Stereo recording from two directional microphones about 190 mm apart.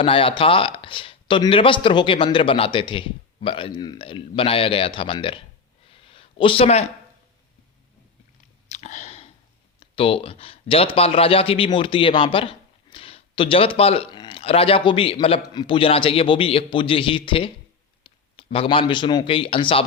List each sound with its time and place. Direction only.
0.0 s a man's voice: 30° left (ahead or behind)
5.9 s a sound: 30° left (ahead or behind)
8.7 s chewing: 35° left (ahead or behind)
9.8 s a man's voice: 30° left (ahead or behind)
18.0 s a sound: 25° left (ahead or behind)
18.5 s a man's voice: 30° left (ahead or behind)